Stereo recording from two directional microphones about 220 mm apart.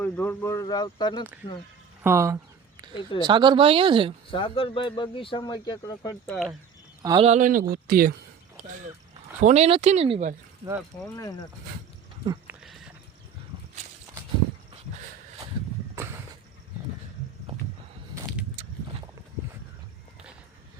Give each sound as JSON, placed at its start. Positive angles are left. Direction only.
{"t": 0.0, "sound": "speech", "side_deg": 5}
{"t": 2.0, "sound": "a sound", "side_deg": -10}
{"t": 3.2, "sound": "speech", "side_deg": -20}
{"t": 4.3, "sound": "speech", "side_deg": 25}
{"t": 6.2, "sound": "speech", "side_deg": 5}
{"t": 7.0, "sound": "speech", "side_deg": -15}
{"t": 7.3, "sound": "speech", "side_deg": -35}
{"t": 9.4, "sound": "speech", "side_deg": -30}
{"t": 11.2, "sound": "speech", "side_deg": 15}
{"t": 12.5, "sound": "a sound", "side_deg": 0}
{"t": 16.0, "sound": "a sound", "side_deg": -15}